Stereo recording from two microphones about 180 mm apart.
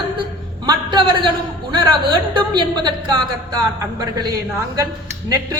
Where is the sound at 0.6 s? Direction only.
25° right (ahead or behind).